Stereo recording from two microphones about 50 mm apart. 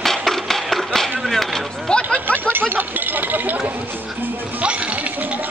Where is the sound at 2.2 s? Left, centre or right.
Right.